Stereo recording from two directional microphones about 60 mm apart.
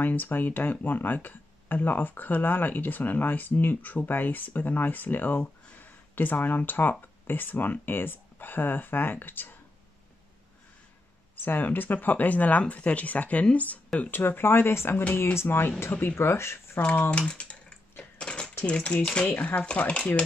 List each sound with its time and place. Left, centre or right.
0.0 s speech: left
11.3 s speech: left
13.9 s speech: left
17.2 s speech: centre
18.1 s cutlery: centre
18.7 s speech: centre